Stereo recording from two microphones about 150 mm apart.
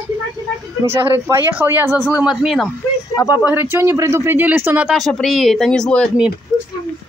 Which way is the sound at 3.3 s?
10° right (ahead or behind).